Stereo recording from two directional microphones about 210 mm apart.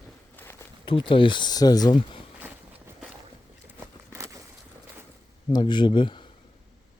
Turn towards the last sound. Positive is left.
turn(degrees=20)  # may be behind; listen again after turning